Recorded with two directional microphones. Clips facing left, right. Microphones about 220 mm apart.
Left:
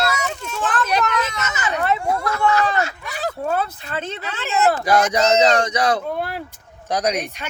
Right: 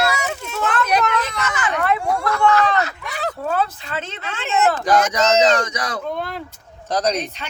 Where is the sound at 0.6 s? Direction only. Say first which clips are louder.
Right 2 dB; 30° left (ahead or behind).